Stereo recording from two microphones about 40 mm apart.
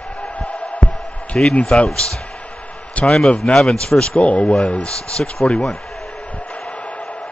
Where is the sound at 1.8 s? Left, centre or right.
Centre.